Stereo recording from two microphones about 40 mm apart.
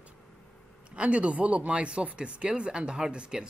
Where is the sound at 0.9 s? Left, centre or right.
Right.